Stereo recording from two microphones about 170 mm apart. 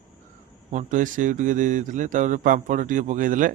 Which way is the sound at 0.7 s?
45° right (ahead or behind).